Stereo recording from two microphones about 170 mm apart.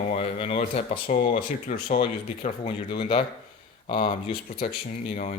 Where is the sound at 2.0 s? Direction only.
30° left (ahead or behind).